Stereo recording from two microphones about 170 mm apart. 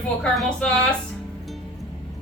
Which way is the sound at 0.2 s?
5° left (ahead or behind).